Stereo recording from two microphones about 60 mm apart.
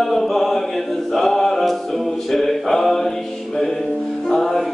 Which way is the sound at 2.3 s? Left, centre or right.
Centre.